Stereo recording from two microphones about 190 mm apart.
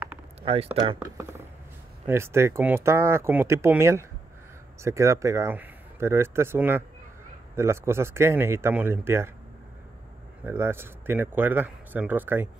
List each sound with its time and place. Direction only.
0.4 s speech: 30° right (ahead or behind)
1.0 s speech: 15° right (ahead or behind)
10.4 s speech: 10° right (ahead or behind)